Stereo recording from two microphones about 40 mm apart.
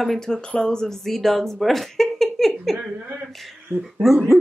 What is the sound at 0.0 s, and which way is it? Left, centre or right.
Speech, centre.